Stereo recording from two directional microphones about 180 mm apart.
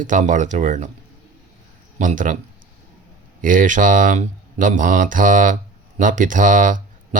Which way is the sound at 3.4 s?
45° right (ahead or behind).